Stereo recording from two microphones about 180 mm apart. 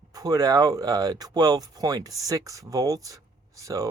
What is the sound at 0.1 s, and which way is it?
Speech, 20° right (ahead or behind).